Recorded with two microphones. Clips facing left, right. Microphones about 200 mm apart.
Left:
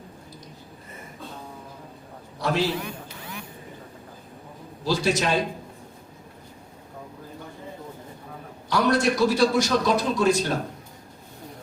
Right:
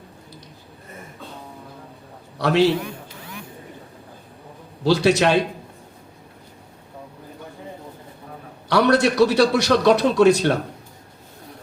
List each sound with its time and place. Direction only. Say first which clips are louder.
2.4 s a man's voice: right 7 dB; 70° right (ahead or behind)
4.8 s a man's voice: right 7 dB; 70° right (ahead or behind)
8.7 s a man's voice: right 5 dB; 70° right (ahead or behind)